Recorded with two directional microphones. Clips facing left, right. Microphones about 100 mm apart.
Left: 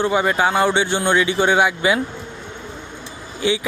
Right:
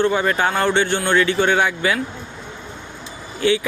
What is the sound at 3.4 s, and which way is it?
Speech, 15° left (ahead or behind).